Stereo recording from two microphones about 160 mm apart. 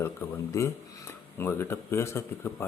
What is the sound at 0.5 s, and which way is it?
Speech, 20° left (ahead or behind).